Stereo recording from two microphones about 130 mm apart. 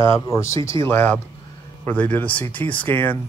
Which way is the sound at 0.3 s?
20° left (ahead or behind).